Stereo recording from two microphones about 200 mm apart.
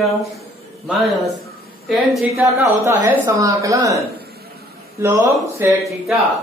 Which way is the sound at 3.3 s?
15° right (ahead or behind).